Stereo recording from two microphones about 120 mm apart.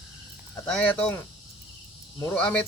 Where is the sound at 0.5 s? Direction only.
10° left (ahead or behind).